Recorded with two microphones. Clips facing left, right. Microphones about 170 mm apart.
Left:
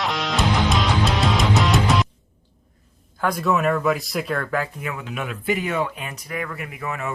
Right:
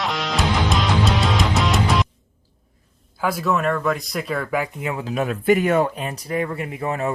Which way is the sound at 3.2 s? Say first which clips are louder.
Even; 5° right (ahead or behind).